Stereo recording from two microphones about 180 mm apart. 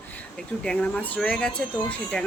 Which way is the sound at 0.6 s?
5° left (ahead or behind).